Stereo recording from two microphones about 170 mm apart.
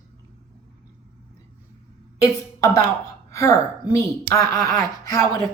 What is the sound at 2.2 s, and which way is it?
A woman's voice, 20° left (ahead or behind).